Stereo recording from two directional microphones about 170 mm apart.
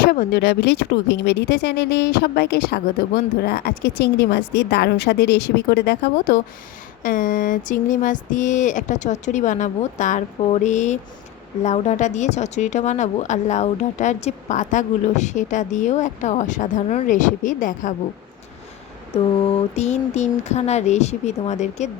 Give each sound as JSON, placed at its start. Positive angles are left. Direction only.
{"t": 0.0, "sound": "speech", "side_deg": 65}
{"t": 7.0, "sound": "a woman's voice", "side_deg": 55}
{"t": 19.7, "sound": "speech", "side_deg": 40}